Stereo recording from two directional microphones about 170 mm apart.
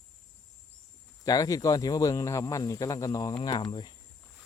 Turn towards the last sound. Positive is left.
turn(degrees=30)  # may be behind; listen again after turning